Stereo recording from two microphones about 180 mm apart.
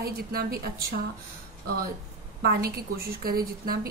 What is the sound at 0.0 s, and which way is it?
Speech, 60° right (ahead or behind).